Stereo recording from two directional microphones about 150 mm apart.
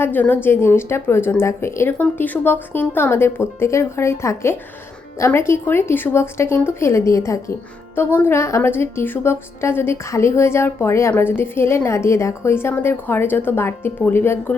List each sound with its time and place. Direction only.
0.0 s a woman's voice: 10° left (ahead or behind)